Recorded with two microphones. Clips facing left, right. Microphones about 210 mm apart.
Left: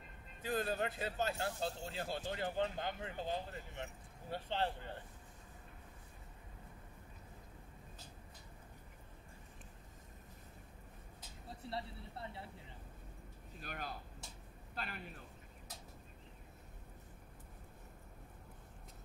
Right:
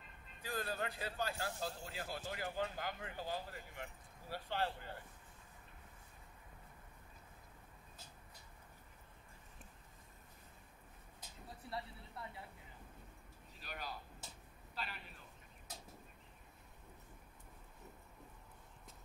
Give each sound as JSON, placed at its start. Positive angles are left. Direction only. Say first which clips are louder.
{"t": 0.4, "sound": "speech", "louder": "left 5 dB", "side_deg": 20}
{"t": 11.6, "sound": "speech", "louder": "left 2 dB", "side_deg": 30}
{"t": 12.2, "sound": "vehicle", "louder": "left 2 dB", "side_deg": 30}
{"t": 13.6, "sound": "a man's voice", "louder": "left 2 dB", "side_deg": 50}